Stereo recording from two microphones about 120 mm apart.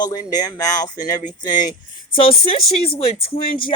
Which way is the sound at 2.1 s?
50° left (ahead or behind).